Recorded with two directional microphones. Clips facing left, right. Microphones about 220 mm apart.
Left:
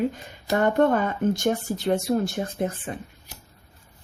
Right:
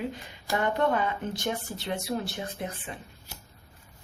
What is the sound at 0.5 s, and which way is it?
Speech, 45° left (ahead or behind).